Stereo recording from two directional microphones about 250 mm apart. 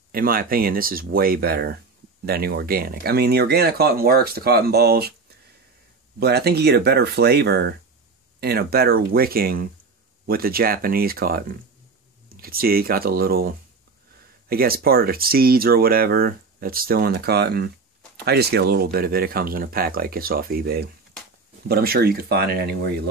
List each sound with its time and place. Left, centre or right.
0.1 s speech: right
6.1 s speech: right